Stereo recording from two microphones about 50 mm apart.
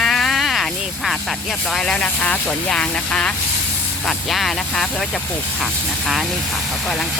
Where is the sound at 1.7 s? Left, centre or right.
Centre.